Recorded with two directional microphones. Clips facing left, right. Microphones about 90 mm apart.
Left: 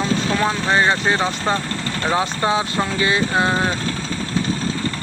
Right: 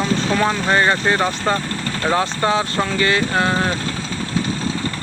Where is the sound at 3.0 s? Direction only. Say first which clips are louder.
Even; 20° left (ahead or behind).